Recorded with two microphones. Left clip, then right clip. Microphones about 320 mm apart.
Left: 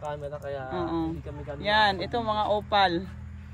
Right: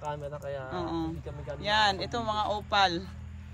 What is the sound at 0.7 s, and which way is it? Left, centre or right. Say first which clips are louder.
Speech: left 5 dB; centre.